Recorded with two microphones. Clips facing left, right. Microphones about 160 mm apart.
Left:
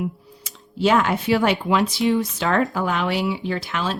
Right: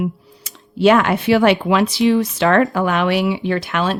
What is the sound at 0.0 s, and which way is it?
Speech, 70° right (ahead or behind).